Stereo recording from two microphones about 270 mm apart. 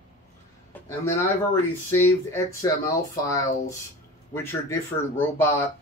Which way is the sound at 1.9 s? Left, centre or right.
Centre.